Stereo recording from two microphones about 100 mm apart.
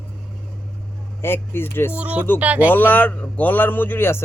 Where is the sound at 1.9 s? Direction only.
15° right (ahead or behind).